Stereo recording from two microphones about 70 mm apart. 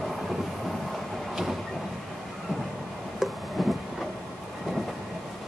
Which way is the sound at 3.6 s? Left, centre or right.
Centre.